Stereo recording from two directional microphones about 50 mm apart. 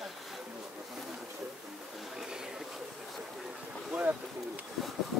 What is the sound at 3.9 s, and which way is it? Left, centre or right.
Boat, right.